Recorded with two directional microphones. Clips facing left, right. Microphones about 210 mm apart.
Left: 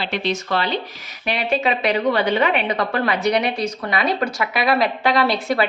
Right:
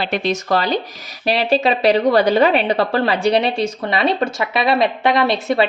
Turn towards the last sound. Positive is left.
turn(degrees=-25)  # may be behind; listen again after turning